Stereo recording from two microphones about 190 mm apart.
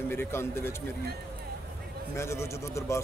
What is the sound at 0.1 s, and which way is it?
Speech, 10° left (ahead or behind).